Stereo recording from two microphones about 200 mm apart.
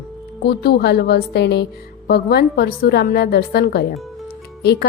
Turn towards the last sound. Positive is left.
turn(degrees=55)  # may be behind; listen again after turning